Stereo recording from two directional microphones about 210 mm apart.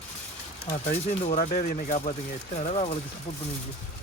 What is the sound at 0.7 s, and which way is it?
Speech, 35° left (ahead or behind).